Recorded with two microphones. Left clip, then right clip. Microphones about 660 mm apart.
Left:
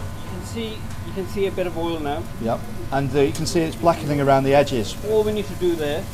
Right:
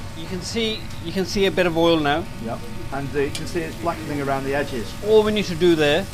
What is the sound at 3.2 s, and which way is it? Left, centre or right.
Speech, centre.